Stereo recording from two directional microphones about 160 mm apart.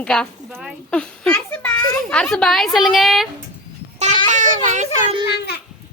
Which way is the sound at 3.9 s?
45° right (ahead or behind).